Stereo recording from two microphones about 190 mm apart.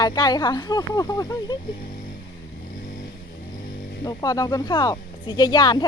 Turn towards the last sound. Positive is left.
turn(degrees=20)  # may be behind; listen again after turning